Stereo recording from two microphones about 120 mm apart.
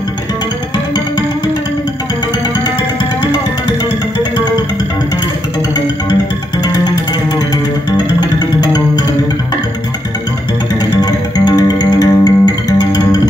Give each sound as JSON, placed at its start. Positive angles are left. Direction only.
{"t": 8.2, "sound": "music", "side_deg": 35}
{"t": 11.0, "sound": "music", "side_deg": 30}